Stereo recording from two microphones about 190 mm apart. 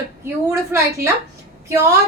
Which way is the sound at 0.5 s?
15° right (ahead or behind).